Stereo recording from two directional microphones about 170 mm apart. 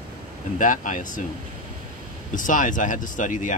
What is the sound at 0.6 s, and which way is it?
Speech, 50° left (ahead or behind).